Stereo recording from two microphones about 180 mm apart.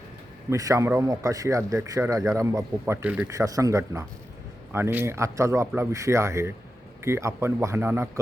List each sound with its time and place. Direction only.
0.5 s a man's voice: 20° right (ahead or behind)